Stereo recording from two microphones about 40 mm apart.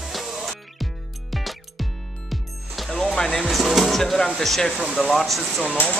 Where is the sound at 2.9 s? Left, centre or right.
Centre.